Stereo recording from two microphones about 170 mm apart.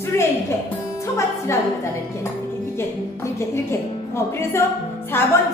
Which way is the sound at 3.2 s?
15° left (ahead or behind).